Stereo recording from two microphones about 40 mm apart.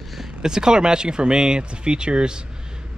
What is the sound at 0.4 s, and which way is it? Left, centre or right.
Speech, centre.